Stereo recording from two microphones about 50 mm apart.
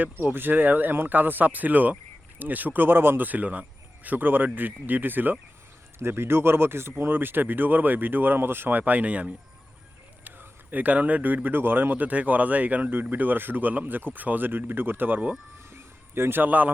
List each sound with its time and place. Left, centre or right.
0.3 s speech: right
6.0 s speech: right
8.8 s speech: right
10.2 s a sound: right
11.4 s speech: right
15.7 s a sound: right
16.4 s speech: right